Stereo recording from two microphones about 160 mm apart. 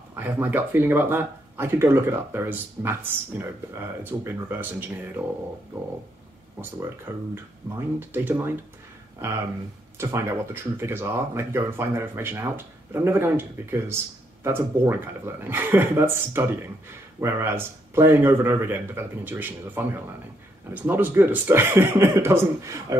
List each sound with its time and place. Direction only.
0.1 s speech: 10° right (ahead or behind)
7.1 s speech: 15° right (ahead or behind)
7.7 s speech: 25° right (ahead or behind)
8.1 s speech: 15° right (ahead or behind)
9.9 s speech: 15° right (ahead or behind)